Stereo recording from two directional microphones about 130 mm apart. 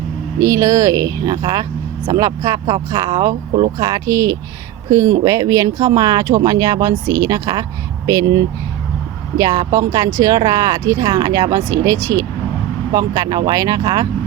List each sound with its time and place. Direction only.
0.3 s speech: 25° right (ahead or behind)
9.4 s speech: 30° right (ahead or behind)